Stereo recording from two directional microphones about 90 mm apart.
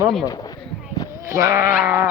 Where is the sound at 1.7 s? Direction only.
15° right (ahead or behind).